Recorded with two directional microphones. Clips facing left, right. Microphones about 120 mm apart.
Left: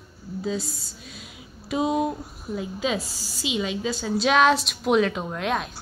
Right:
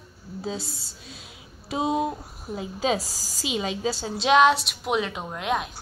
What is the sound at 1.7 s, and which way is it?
A woman's voice, 25° right (ahead or behind).